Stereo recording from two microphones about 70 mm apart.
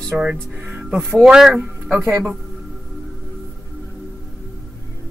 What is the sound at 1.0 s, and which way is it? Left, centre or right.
A man's voice, centre.